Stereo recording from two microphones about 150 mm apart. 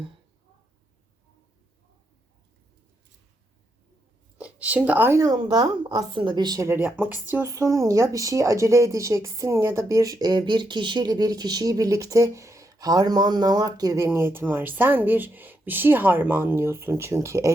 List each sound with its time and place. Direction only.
4.4 s a woman's voice: 10° right (ahead or behind)